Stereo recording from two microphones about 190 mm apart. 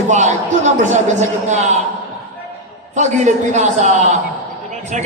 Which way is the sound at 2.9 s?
40° right (ahead or behind).